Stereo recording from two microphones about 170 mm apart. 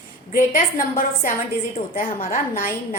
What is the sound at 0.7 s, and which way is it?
A woman's voice, 55° left (ahead or behind).